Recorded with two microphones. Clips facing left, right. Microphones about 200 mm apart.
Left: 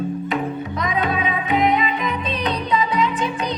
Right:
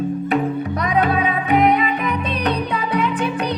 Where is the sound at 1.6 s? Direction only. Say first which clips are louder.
Right 1 dB; 60° right (ahead or behind).